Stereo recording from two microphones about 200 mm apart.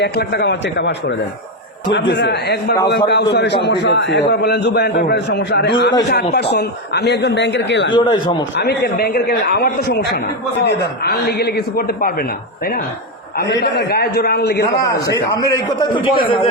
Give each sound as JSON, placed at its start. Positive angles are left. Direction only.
{"t": 0.0, "sound": "a man's voice", "side_deg": 55}
{"t": 13.3, "sound": "a man's voice", "side_deg": 60}
{"t": 14.8, "sound": "a man's voice", "side_deg": 15}